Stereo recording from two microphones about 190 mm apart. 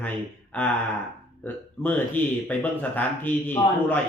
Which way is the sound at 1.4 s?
10° left (ahead or behind).